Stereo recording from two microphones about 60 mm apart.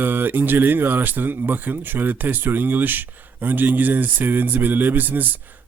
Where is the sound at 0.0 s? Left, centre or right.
Right.